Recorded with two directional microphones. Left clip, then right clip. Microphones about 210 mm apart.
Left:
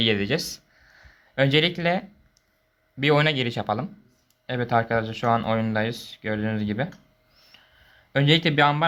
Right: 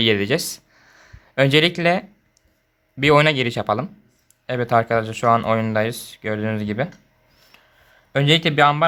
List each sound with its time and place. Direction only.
0.0 s speech: 15° right (ahead or behind)
7.5 s a sound: 10° right (ahead or behind)
8.1 s speech: 10° right (ahead or behind)